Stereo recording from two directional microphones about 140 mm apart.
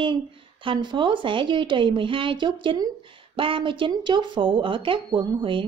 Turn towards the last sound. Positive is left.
turn(degrees=-40)  # may be behind; listen again after turning